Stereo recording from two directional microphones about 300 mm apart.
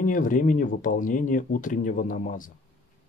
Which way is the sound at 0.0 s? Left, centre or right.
Left.